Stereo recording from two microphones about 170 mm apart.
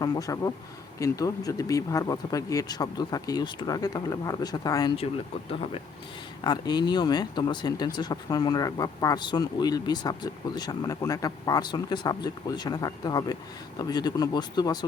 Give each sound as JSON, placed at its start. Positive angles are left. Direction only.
{"t": 0.0, "sound": "speech", "side_deg": 20}
{"t": 4.9, "sound": "speech", "side_deg": 35}